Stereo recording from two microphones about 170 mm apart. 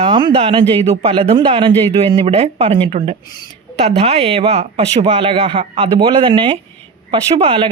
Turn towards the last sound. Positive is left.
turn(degrees=-30)  # may be behind; listen again after turning